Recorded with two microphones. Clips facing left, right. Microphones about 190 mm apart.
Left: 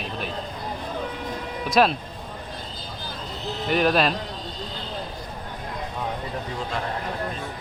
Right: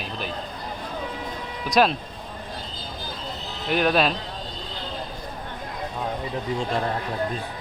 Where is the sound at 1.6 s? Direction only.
Centre (ahead or behind).